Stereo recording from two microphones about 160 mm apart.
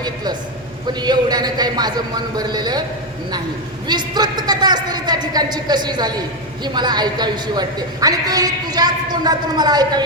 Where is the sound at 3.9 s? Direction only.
25° right (ahead or behind).